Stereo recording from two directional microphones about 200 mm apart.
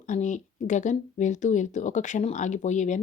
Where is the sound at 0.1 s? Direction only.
40° left (ahead or behind).